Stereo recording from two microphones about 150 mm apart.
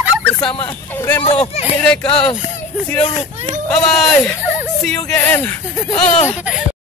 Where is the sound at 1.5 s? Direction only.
45° left (ahead or behind).